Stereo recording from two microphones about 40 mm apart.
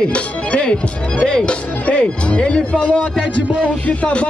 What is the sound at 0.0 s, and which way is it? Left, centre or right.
Music, left.